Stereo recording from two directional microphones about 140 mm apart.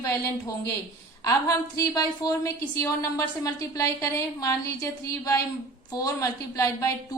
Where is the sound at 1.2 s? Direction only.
25° left (ahead or behind).